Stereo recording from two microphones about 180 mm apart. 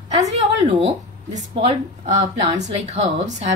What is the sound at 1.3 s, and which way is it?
A woman's voice, 40° right (ahead or behind).